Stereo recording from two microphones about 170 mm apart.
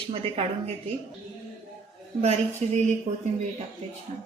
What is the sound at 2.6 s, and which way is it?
Speech, 40° right (ahead or behind).